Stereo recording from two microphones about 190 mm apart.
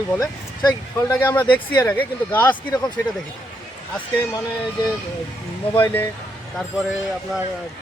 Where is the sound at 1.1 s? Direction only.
10° left (ahead or behind).